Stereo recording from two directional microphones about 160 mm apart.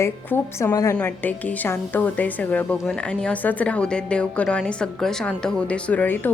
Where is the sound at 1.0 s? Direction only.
10° left (ahead or behind).